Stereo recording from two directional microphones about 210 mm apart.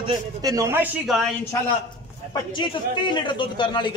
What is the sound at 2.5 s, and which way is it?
A man's voice, 20° left (ahead or behind).